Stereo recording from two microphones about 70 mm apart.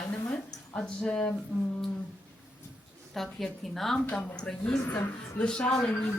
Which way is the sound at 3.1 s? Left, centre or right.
Centre.